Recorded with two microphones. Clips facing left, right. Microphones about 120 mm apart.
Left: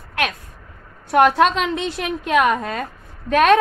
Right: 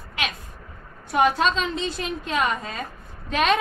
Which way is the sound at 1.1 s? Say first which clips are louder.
Left 6 dB; 70° left (ahead or behind).